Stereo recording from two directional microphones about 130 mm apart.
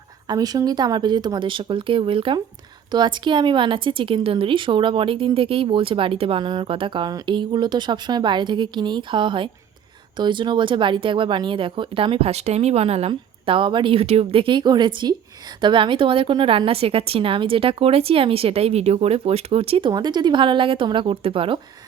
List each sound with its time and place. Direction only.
0.3 s a woman's voice: 30° right (ahead or behind); by 19.9 s 45° right (ahead or behind)
19.9 s a woman's voice: 35° right (ahead or behind)